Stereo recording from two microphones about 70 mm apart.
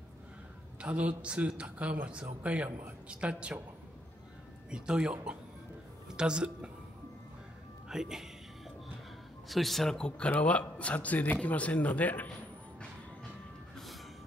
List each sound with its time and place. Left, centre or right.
0.7 s a woman's voice: centre
4.6 s speech: centre
7.9 s speech: centre
9.5 s a man's voice: centre; by 12.3 s left